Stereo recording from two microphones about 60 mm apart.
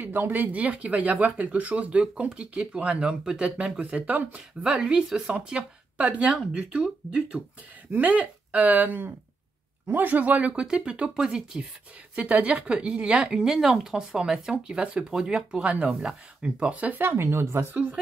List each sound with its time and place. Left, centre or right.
0.0 s speech: right
10.5 s a woman's voice: centre
17.0 s speech: right